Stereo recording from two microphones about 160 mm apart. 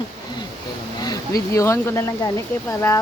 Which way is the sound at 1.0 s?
20° left (ahead or behind).